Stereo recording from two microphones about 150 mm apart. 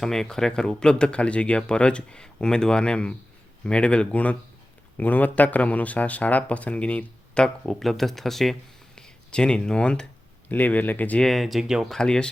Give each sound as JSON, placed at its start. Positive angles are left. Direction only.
{"t": 0.0, "sound": "speech", "side_deg": 5}